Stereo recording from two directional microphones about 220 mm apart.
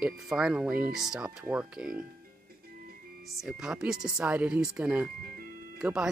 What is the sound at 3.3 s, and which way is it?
Speech, centre (ahead or behind).